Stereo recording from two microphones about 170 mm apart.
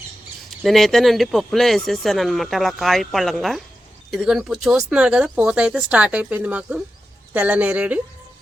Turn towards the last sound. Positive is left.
turn(degrees=-10)  # may be behind; listen again after turning